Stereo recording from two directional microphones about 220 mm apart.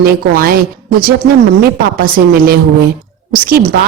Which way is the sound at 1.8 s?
40° right (ahead or behind).